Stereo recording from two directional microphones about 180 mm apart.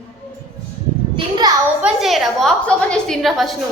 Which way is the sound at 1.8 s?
Centre (ahead or behind).